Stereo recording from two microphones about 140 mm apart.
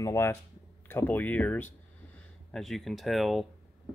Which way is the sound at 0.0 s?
20° left (ahead or behind).